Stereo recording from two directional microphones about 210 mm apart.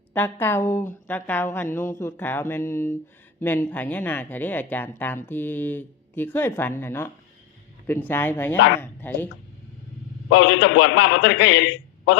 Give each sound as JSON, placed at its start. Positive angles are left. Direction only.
{"t": 0.1, "sound": "speech", "side_deg": 10}
{"t": 10.2, "sound": "a man's voice", "side_deg": 70}